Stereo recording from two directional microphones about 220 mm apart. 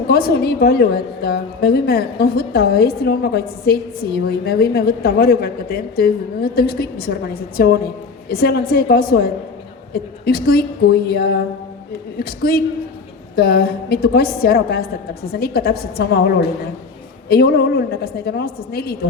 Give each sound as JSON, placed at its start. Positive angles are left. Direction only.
{"t": 0.1, "sound": "a woman's voice", "side_deg": 45}